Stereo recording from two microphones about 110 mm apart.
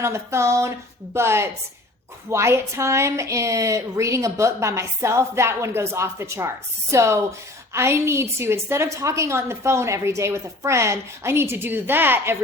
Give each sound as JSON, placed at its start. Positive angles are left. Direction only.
{"t": 0.0, "sound": "a woman's voice", "side_deg": -25}